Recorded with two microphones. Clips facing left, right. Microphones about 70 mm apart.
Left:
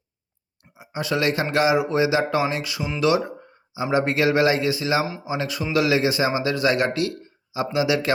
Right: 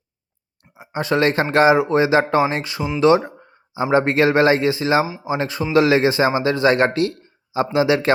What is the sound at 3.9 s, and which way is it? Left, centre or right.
Speech, right.